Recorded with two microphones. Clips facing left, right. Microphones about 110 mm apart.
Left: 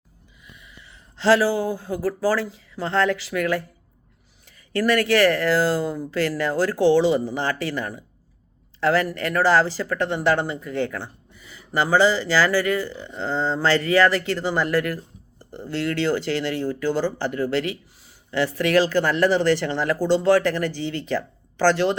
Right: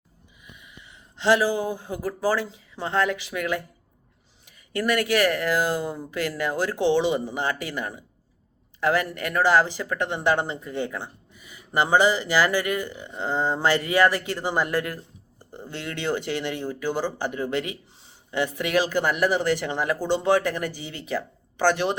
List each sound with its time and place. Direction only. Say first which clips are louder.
0.4 s speech: even; 20° right (ahead or behind)